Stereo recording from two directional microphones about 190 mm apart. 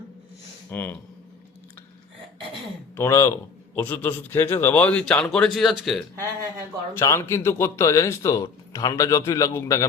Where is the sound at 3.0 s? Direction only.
15° left (ahead or behind).